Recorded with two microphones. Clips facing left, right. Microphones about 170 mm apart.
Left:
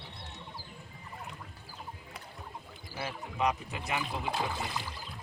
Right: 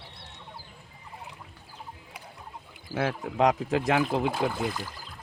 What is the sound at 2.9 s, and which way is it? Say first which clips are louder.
Speech: right 10 dB; 90° right.